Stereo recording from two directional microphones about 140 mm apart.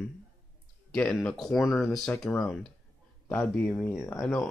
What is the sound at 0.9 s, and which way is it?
Speech, 5° left (ahead or behind).